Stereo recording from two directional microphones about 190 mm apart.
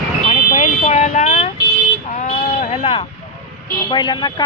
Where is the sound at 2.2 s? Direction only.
30° left (ahead or behind).